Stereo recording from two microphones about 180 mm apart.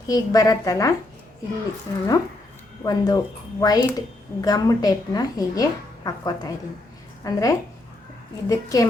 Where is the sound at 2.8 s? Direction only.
20° left (ahead or behind).